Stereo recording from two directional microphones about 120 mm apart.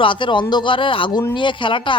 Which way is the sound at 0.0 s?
45° left (ahead or behind).